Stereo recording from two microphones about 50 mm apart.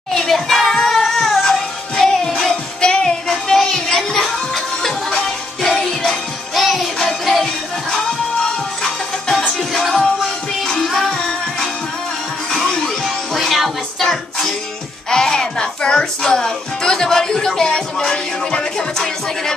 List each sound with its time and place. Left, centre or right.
0.1 s music: centre
2.8 s music: centre
15.0 s speech: centre
18.5 s music: centre